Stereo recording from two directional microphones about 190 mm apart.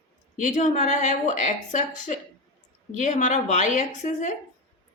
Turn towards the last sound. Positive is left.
turn(degrees=40)  # may be behind; listen again after turning